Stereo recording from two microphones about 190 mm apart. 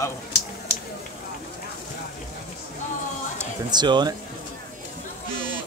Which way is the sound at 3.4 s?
20° right (ahead or behind).